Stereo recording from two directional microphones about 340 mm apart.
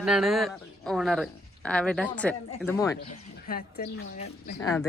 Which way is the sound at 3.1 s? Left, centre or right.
Left.